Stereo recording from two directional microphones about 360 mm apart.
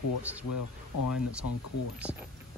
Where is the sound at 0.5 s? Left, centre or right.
Left.